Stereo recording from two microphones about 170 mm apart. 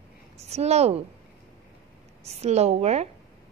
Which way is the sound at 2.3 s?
40° right (ahead or behind).